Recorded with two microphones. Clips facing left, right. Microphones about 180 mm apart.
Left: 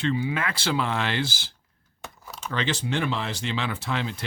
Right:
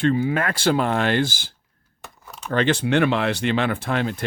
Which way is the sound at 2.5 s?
55° right (ahead or behind).